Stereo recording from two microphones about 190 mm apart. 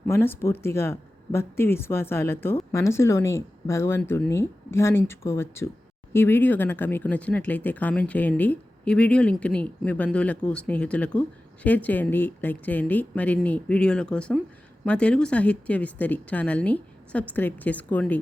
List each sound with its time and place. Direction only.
0.1 s speech: 15° left (ahead or behind)